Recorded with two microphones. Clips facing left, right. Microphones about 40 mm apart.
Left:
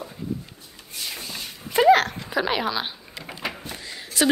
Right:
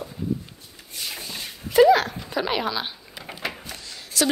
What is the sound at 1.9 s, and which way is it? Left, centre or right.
Speech, left.